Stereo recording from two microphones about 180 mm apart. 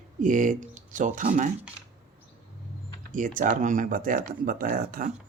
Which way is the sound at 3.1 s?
50° right (ahead or behind).